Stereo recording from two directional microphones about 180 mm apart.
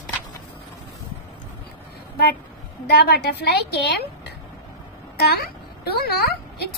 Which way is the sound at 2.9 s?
60° left (ahead or behind).